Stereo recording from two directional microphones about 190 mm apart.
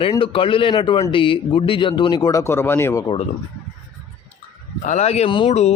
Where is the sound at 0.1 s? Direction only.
30° left (ahead or behind).